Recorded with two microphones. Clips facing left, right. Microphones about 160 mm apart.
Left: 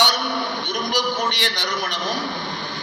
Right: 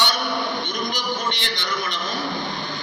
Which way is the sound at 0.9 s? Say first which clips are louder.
Left 4 dB; 70° left (ahead or behind).